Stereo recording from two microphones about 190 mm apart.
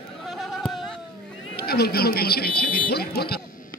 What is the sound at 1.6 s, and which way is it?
Speech, 55° left (ahead or behind).